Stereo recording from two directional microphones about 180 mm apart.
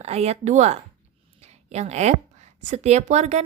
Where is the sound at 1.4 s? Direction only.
35° right (ahead or behind).